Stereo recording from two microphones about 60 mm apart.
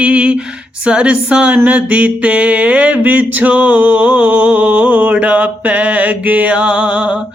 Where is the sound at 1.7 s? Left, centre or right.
Right.